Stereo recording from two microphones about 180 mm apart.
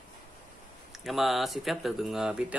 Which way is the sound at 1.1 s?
Centre (ahead or behind).